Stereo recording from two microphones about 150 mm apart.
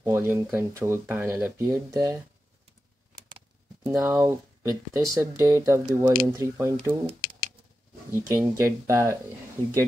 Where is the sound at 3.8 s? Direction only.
20° right (ahead or behind).